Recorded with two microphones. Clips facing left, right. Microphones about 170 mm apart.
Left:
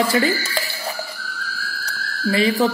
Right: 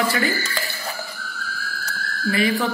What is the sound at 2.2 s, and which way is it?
Speech, 35° left (ahead or behind).